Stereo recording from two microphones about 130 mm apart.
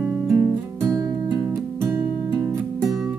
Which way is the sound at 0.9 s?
30° right (ahead or behind).